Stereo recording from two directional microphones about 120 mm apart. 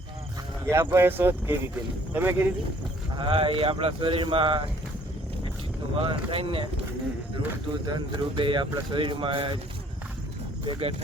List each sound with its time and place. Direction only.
0.7 s speech: 20° right (ahead or behind)
3.2 s speech: 45° right (ahead or behind)
6.0 s speech: 50° right (ahead or behind)
7.9 s speech: 40° right (ahead or behind)
10.7 s speech: 55° right (ahead or behind)